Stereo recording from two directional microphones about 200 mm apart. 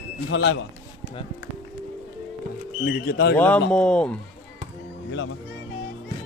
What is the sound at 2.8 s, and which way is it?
Speech, 50° left (ahead or behind).